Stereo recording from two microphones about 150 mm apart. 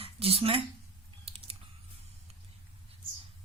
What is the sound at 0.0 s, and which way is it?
Speech, 40° right (ahead or behind).